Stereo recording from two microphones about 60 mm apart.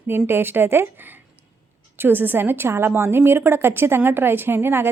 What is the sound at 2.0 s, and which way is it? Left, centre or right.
A woman's voice, right.